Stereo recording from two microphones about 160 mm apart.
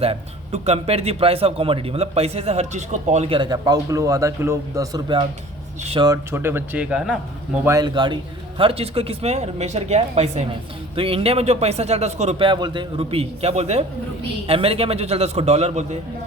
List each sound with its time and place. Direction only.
0.0 s speech: 40° right (ahead or behind)
5.8 s speech: 40° right (ahead or behind)
6.1 s speech: 15° right (ahead or behind)
7.6 s speech: 20° right (ahead or behind); by 12.5 s 45° right (ahead or behind)
12.5 s speech: 30° right (ahead or behind)